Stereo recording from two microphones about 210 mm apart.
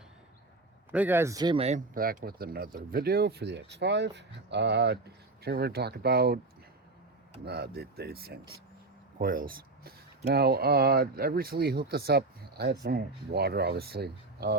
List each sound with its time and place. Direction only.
0.9 s speech: 10° right (ahead or behind); by 6.4 s 50° right (ahead or behind)
7.4 s speech: 50° right (ahead or behind)